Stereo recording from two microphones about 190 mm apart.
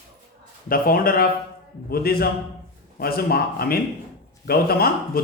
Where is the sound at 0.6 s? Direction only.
50° left (ahead or behind).